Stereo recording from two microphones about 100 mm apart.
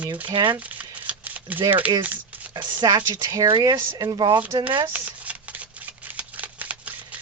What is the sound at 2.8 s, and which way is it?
A woman's voice, 45° right (ahead or behind).